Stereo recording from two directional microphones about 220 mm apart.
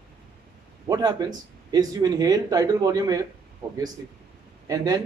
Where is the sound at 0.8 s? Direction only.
15° right (ahead or behind).